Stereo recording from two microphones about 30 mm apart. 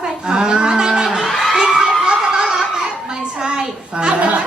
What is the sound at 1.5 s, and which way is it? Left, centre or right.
Crowd, right.